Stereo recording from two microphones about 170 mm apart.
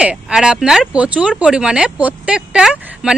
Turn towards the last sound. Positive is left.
turn(degrees=-5)  # may be behind; listen again after turning